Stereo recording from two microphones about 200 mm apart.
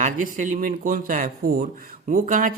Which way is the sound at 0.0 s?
40° right (ahead or behind).